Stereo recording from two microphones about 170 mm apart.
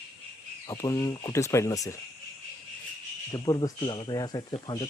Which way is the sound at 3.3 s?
20° left (ahead or behind).